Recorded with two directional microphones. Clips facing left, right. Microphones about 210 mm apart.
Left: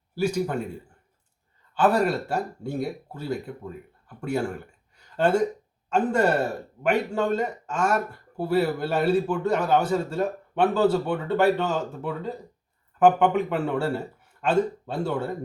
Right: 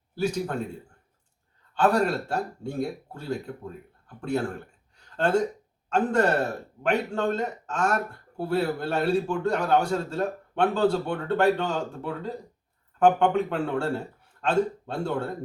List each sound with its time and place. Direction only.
0.2 s speech: 10° left (ahead or behind)
1.7 s speech: 5° left (ahead or behind)